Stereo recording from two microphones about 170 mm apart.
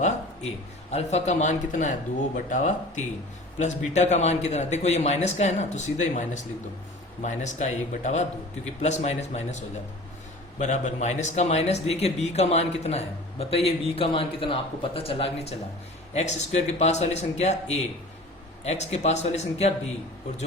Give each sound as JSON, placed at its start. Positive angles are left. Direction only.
{"t": 0.9, "sound": "a man's voice", "side_deg": 40}